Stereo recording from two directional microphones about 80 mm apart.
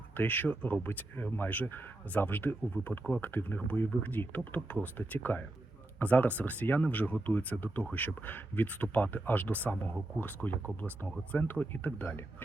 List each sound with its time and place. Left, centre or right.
0.2 s speech: left